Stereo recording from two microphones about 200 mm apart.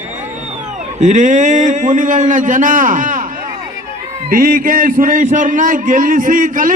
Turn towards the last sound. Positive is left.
turn(degrees=-45)  # may be behind; listen again after turning